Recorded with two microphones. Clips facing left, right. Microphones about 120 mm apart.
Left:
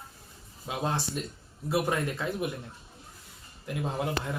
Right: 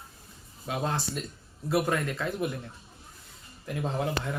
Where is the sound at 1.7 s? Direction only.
15° left (ahead or behind).